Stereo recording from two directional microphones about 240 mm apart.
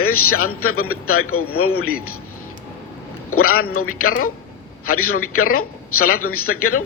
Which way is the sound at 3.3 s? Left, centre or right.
Left.